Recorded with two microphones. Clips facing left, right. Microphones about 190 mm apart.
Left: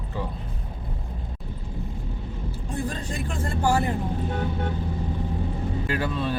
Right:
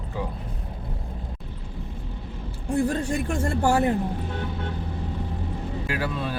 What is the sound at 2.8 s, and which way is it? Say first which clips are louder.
Speech: right 6 dB; 55° right (ahead or behind).